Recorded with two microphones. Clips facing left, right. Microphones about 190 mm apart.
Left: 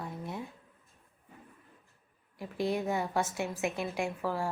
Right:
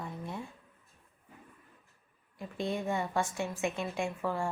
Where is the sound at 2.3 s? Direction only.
5° left (ahead or behind).